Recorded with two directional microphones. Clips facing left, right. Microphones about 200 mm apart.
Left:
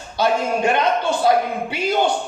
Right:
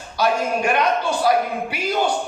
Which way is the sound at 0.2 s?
25° left (ahead or behind).